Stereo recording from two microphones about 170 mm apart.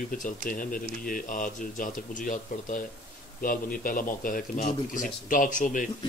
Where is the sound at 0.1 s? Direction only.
55° left (ahead or behind).